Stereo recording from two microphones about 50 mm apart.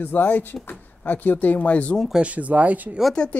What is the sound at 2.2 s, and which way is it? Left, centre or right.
Speech, right.